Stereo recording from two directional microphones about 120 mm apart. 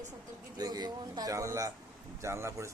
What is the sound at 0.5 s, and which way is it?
Speech, 35° right (ahead or behind).